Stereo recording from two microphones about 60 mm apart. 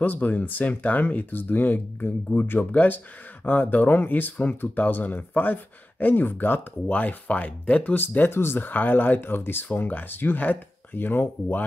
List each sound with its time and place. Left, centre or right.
0.0 s speech: left